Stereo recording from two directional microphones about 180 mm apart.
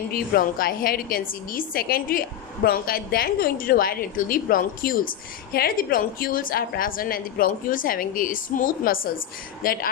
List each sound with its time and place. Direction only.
0.1 s a woman's voice: 55° left (ahead or behind)